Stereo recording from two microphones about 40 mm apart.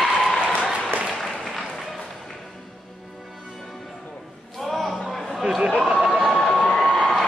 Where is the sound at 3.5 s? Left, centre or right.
Centre.